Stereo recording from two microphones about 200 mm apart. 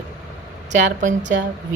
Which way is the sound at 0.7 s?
40° right (ahead or behind).